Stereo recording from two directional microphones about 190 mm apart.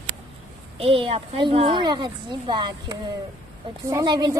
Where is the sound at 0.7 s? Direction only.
30° right (ahead or behind).